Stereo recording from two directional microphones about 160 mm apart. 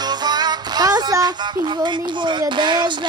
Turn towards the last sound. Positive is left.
turn(degrees=-30)  # may be behind; listen again after turning